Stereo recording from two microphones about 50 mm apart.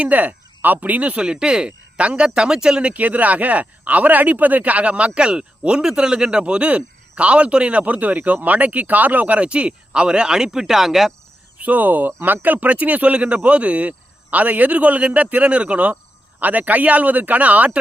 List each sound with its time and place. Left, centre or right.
0.0 s speech: right
1.2 s speech: centre
2.9 s speech: right; by 11.1 s centre
11.5 s speech: right